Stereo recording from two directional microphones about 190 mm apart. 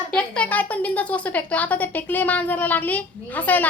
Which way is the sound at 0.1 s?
5° left (ahead or behind).